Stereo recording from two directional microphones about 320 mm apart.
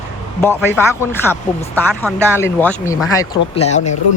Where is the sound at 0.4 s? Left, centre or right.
Centre.